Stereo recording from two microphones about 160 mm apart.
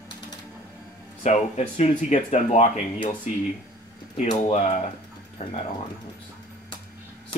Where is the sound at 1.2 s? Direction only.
45° left (ahead or behind).